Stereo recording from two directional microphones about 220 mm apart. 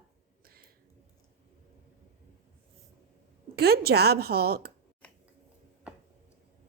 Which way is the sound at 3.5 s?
45° right (ahead or behind).